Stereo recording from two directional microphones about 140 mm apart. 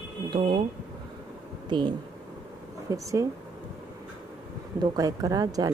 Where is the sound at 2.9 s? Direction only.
25° right (ahead or behind).